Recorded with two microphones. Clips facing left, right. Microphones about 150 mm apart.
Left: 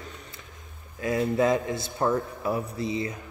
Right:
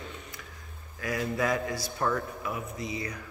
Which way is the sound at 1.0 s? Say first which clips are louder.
Left 6 dB; 25° left (ahead or behind).